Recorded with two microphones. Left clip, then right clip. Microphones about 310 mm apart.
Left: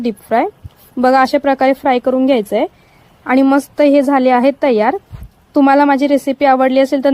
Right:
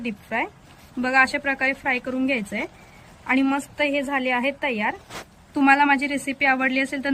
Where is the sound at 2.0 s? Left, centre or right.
Left.